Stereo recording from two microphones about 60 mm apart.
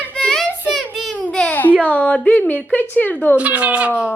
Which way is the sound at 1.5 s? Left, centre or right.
Left.